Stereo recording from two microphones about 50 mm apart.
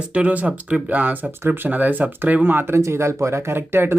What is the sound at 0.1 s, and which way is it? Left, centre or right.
Speech, right.